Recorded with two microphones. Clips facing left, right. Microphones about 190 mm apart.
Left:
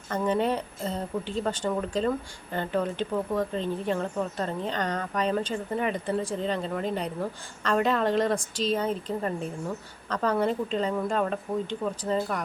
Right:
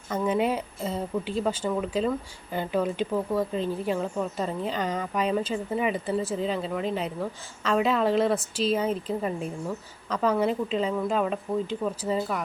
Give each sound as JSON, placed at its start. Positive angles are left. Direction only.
{"t": 0.1, "sound": "a woman's voice", "side_deg": -10}